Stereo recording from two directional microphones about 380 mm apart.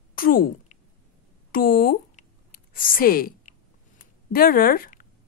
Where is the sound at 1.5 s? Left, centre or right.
Left.